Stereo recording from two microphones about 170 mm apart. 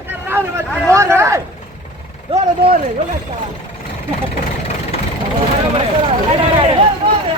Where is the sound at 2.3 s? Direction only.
40° right (ahead or behind).